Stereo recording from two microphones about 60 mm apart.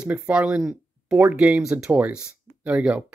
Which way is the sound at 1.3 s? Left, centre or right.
Centre.